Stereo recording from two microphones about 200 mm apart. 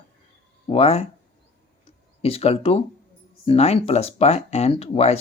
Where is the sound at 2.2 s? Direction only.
30° left (ahead or behind).